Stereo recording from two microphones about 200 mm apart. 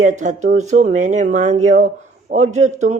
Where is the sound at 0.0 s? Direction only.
40° right (ahead or behind).